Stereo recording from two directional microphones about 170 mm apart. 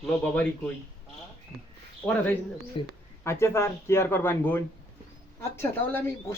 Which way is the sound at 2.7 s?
30° left (ahead or behind).